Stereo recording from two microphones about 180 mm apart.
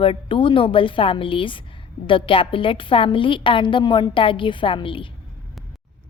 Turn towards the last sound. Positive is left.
turn(degrees=30)  # may be behind; listen again after turning